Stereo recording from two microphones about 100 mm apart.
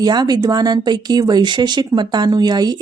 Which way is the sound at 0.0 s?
45° right (ahead or behind).